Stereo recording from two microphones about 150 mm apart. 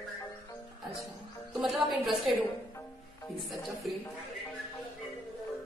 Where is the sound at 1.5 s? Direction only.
Centre (ahead or behind).